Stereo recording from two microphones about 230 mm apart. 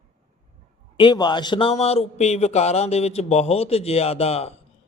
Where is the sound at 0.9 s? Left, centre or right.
Centre.